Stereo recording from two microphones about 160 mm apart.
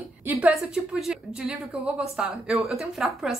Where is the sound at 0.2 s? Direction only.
15° right (ahead or behind).